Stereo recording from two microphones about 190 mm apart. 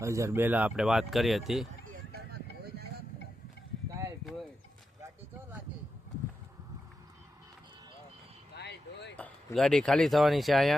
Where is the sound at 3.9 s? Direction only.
15° right (ahead or behind).